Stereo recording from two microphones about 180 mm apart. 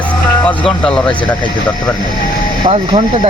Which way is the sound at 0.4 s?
5° left (ahead or behind).